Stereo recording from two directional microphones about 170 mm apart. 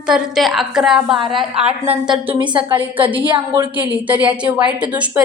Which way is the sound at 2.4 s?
30° right (ahead or behind).